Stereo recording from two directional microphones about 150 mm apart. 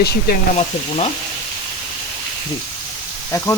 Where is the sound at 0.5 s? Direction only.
45° left (ahead or behind).